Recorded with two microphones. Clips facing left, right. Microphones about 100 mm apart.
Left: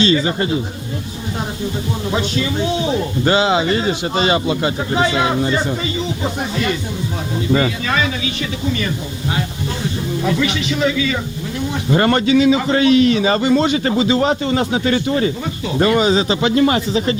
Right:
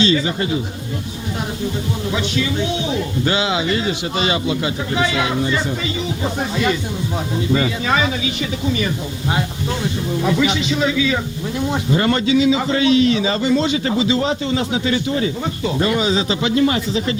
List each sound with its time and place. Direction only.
0.0 s a man's voice: 45° left (ahead or behind)
2.1 s speech: 40° left (ahead or behind)
7.9 s speech: 20° right (ahead or behind)
10.2 s speech: 10° right (ahead or behind)
11.9 s a man's voice: 55° left (ahead or behind)